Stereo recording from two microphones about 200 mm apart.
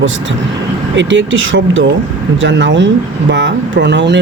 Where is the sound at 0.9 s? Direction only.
70° right (ahead or behind).